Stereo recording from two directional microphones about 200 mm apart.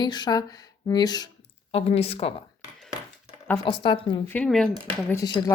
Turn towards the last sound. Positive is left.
turn(degrees=15)  # may be behind; listen again after turning